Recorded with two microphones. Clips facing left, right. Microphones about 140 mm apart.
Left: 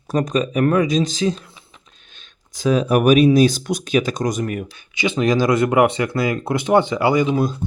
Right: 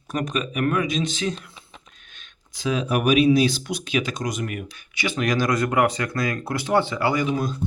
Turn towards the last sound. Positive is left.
turn(degrees=25)  # may be behind; listen again after turning